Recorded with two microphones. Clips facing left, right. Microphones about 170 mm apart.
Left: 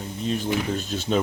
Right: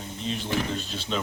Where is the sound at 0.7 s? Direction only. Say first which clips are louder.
Left 5 dB; 45° left (ahead or behind).